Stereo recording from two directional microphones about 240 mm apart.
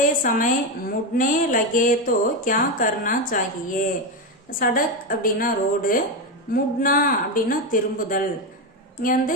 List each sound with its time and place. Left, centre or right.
0.0 s speech: left